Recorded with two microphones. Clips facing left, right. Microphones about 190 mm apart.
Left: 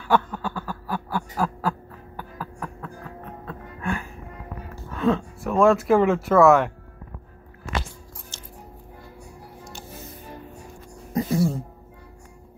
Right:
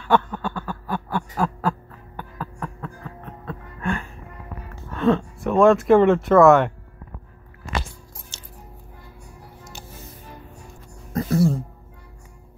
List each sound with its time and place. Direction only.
0.0 s a sound: 5° left (ahead or behind)
3.4 s music: 5° left (ahead or behind)
4.9 s speech: 5° left (ahead or behind)
11.1 s music: 10° left (ahead or behind)